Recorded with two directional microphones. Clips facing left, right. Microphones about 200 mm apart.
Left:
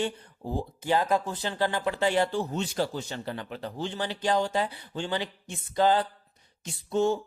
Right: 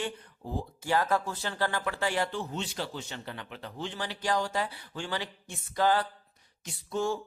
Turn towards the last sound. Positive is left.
turn(degrees=25)  # may be behind; listen again after turning